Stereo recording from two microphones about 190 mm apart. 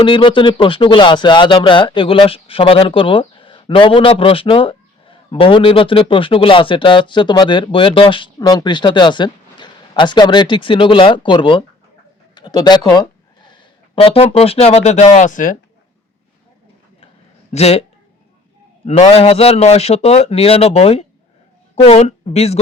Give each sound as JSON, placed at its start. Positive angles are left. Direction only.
{"t": 0.0, "sound": "speech", "side_deg": 25}
{"t": 17.5, "sound": "a man's voice", "side_deg": 35}
{"t": 18.9, "sound": "a man's voice", "side_deg": 35}